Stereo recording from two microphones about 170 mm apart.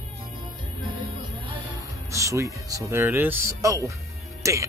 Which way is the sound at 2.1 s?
20° right (ahead or behind).